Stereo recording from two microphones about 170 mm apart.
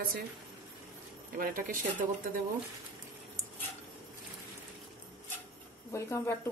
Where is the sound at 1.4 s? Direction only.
55° right (ahead or behind).